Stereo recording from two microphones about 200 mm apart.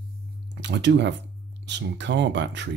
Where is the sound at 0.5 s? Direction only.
60° right (ahead or behind).